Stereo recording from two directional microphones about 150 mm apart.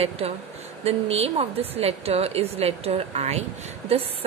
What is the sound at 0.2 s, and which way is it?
A woman's voice, 45° right (ahead or behind).